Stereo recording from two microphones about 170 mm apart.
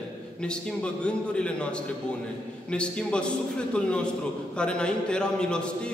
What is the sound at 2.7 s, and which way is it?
Speech, 5° left (ahead or behind).